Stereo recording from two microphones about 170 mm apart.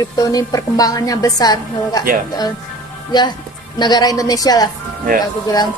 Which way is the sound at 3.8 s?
25° left (ahead or behind).